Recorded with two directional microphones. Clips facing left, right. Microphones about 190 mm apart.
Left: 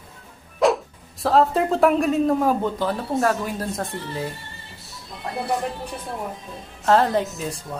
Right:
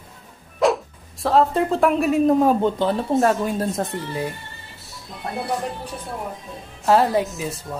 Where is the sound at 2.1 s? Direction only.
20° right (ahead or behind).